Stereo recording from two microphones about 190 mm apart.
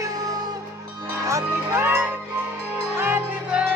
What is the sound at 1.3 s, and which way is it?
Music, 15° right (ahead or behind).